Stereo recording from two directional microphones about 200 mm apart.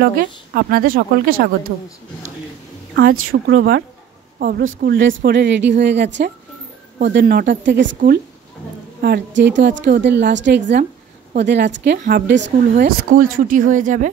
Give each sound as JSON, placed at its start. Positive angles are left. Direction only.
{"t": 0.0, "sound": "speech", "side_deg": -45}
{"t": 3.1, "sound": "speech", "side_deg": -90}
{"t": 4.4, "sound": "a woman's voice", "side_deg": -50}
{"t": 4.8, "sound": "a woman's voice", "side_deg": -70}
{"t": 9.0, "sound": "a woman's voice", "side_deg": -55}
{"t": 12.7, "sound": "speech", "side_deg": -45}